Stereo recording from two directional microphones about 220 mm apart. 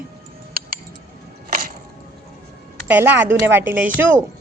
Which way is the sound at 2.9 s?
10° right (ahead or behind).